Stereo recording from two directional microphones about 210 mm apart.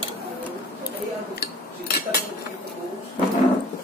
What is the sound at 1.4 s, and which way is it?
Cutlery, 50° left (ahead or behind).